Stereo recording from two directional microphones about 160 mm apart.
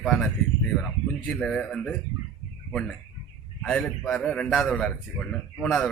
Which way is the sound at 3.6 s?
5° left (ahead or behind).